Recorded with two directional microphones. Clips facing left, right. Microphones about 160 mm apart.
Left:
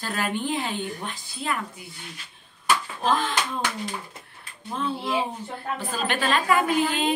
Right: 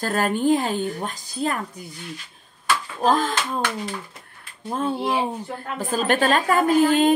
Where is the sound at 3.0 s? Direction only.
40° right (ahead or behind).